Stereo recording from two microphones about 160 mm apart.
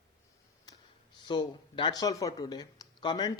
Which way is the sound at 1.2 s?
30° left (ahead or behind).